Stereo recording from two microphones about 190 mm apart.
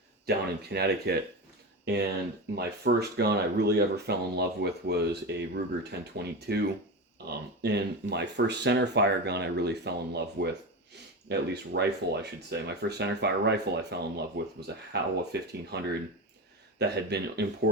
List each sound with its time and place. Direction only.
0.3 s speech: 55° right (ahead or behind)